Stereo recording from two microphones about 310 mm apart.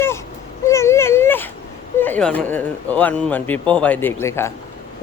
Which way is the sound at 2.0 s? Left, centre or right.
Centre.